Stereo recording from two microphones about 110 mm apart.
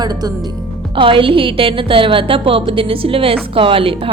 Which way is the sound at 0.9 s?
50° right (ahead or behind).